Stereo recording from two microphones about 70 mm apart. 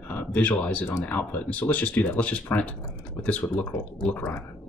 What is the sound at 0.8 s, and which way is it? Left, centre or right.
Speech, left.